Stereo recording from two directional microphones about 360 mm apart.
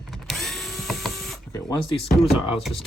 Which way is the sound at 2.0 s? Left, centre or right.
Centre.